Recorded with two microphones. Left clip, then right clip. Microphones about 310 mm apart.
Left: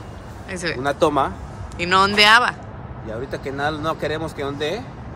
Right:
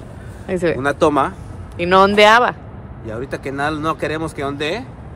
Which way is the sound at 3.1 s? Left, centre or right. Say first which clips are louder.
Right 3 dB; right.